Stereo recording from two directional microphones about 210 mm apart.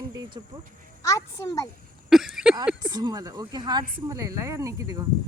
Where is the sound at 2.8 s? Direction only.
20° right (ahead or behind).